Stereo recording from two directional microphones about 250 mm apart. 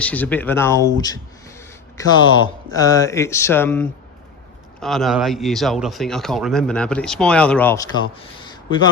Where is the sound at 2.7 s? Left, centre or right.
Centre.